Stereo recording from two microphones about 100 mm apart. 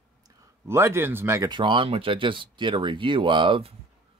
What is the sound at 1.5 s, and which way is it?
Speech, 55° right (ahead or behind).